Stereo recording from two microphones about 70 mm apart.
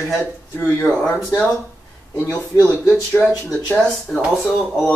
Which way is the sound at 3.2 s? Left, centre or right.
Left.